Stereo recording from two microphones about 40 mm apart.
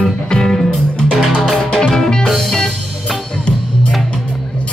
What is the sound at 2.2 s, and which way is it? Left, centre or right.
Music, centre.